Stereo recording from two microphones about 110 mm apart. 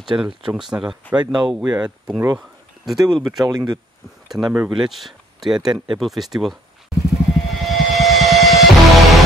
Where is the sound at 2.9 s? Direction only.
35° right (ahead or behind).